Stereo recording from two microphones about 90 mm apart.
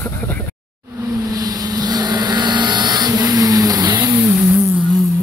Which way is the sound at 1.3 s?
45° right (ahead or behind).